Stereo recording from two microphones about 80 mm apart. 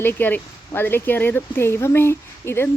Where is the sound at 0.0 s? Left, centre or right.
Left.